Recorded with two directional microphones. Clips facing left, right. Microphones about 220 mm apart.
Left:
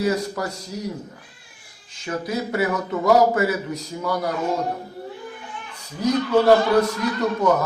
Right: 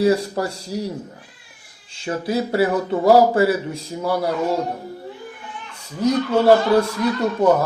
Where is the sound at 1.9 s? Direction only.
30° right (ahead or behind).